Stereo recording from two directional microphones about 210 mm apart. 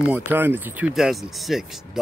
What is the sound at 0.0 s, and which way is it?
Speech, 10° right (ahead or behind).